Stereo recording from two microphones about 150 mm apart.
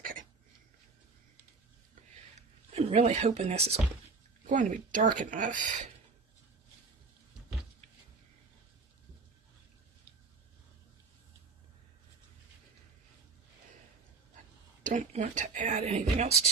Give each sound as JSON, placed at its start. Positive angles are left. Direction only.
{"t": 0.0, "sound": "a sound", "side_deg": -65}
{"t": 2.7, "sound": "a woman's voice", "side_deg": -45}
{"t": 4.4, "sound": "speech", "side_deg": -60}
{"t": 14.8, "sound": "a woman's voice", "side_deg": -55}